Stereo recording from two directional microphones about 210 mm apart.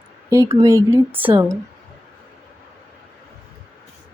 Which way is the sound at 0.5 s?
15° right (ahead or behind).